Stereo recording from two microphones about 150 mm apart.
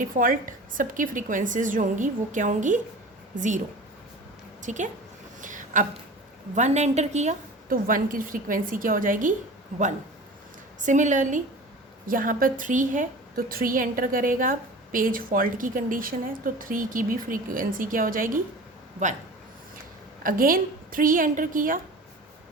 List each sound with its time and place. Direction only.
0.0 s a woman's voice: 65° right (ahead or behind)
4.6 s a woman's voice: 55° right (ahead or behind)
5.4 s a sound: 60° right (ahead or behind)
6.6 s a woman's voice: 50° right (ahead or behind)
7.7 s a woman's voice: 70° right (ahead or behind)
10.8 s a woman's voice: 55° right (ahead or behind)
12.0 s a woman's voice: 70° right (ahead or behind)
19.0 s a woman's voice: 55° right (ahead or behind)
20.2 s a woman's voice: 70° right (ahead or behind)